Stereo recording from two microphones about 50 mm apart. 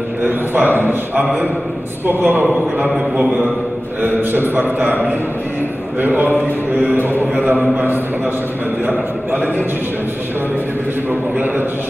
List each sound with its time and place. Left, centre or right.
0.2 s a man's voice: right
4.0 s mantra: right
9.3 s mantra: right
11.1 s mantra: right